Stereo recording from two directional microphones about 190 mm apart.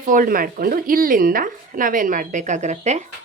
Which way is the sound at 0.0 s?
45° right (ahead or behind).